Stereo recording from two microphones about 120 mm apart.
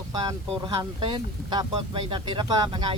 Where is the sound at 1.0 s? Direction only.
40° right (ahead or behind).